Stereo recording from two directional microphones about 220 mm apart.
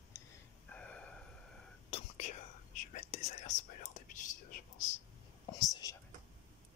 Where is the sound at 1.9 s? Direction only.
30° left (ahead or behind).